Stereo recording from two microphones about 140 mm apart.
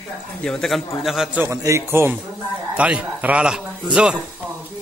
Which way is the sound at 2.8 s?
10° right (ahead or behind).